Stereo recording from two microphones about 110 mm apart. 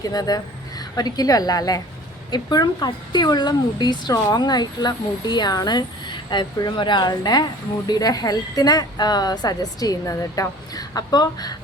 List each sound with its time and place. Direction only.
0.0 s a woman's voice: 35° left (ahead or behind)